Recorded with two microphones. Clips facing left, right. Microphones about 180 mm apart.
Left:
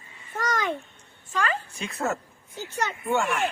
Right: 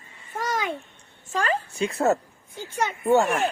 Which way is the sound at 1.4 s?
35° right (ahead or behind).